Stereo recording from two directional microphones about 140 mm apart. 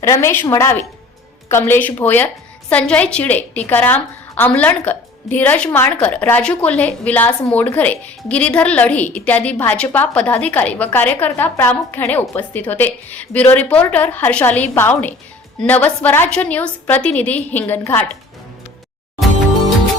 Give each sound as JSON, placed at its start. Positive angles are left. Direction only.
{"t": 0.0, "sound": "a woman's voice", "side_deg": 20}